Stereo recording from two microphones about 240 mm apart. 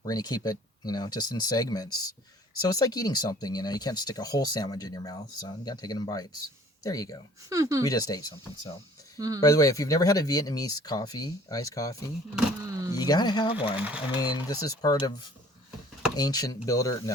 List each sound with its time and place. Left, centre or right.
0.0 s speech: centre
7.5 s speech: centre
7.9 s speech: centre
9.1 s speech: centre
9.4 s speech: centre
12.6 s vehicle: centre
13.0 s speech: centre
13.7 s speech: centre
14.2 s speech: centre
16.1 s speech: centre